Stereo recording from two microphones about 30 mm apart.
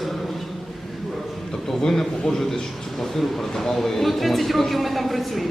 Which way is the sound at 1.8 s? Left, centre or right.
Centre.